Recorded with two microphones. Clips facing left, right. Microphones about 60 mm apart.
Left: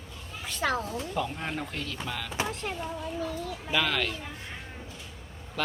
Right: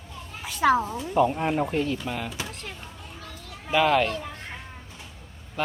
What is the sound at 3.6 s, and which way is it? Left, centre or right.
Speech, centre.